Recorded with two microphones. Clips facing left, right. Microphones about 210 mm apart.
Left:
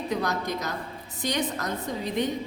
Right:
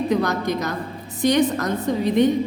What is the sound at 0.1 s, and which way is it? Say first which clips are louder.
Speech: right 7 dB; 85° right.